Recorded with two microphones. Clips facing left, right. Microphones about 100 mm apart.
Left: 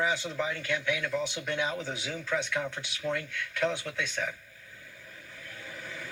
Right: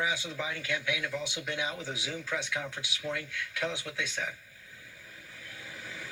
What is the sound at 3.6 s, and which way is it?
Speech, 55° left (ahead or behind).